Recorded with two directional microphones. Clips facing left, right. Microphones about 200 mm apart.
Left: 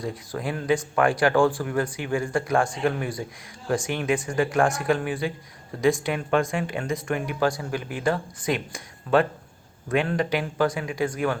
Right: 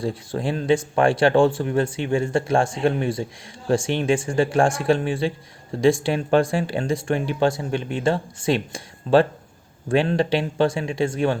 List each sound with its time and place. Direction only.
0.0 s speech: 30° right (ahead or behind)